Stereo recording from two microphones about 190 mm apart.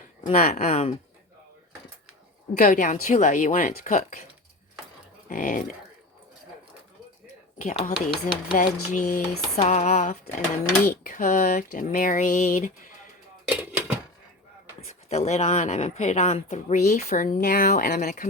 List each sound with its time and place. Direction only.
0.3 s speech: 40° left (ahead or behind)
2.6 s speech: 45° left (ahead or behind)
5.3 s speech: 45° left (ahead or behind)
7.6 s speech: 40° left (ahead or behind)
13.5 s a sound: 10° right (ahead or behind)
15.1 s speech: 35° left (ahead or behind)